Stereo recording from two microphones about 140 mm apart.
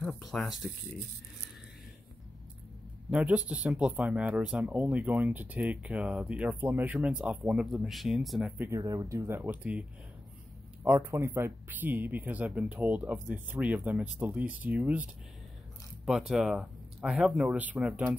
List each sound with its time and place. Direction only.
0.0 s speech: centre (ahead or behind)
3.1 s speech: 10° right (ahead or behind)
8.5 s speech: 20° right (ahead or behind)
16.1 s speech: 5° right (ahead or behind)